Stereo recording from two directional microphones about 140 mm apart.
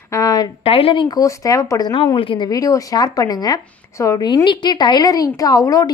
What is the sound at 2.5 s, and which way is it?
Speech, 25° left (ahead or behind).